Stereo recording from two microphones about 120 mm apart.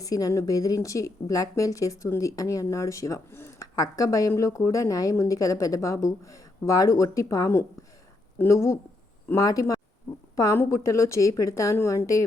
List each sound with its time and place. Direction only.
0.0 s speech: 30° left (ahead or behind)